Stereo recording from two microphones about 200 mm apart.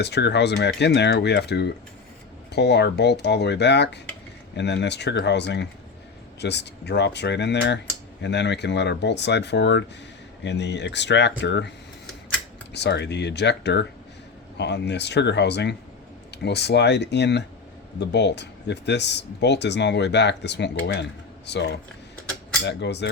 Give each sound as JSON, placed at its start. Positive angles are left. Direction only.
{"t": 0.0, "sound": "speech", "side_deg": 55}
{"t": 12.7, "sound": "speech", "side_deg": 55}